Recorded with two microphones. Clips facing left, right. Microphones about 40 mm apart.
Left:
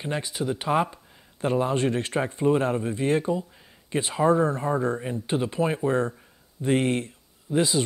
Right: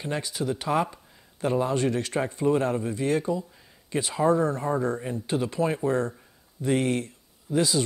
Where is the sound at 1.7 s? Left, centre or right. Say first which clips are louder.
Left 1 dB; left.